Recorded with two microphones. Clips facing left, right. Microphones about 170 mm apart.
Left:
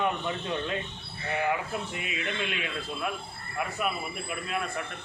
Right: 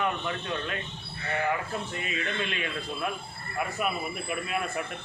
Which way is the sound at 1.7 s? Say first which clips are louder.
Right 1 dB; 10° left (ahead or behind).